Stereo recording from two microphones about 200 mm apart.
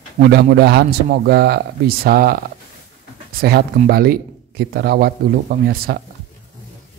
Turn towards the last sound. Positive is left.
turn(degrees=-50)  # may be behind; listen again after turning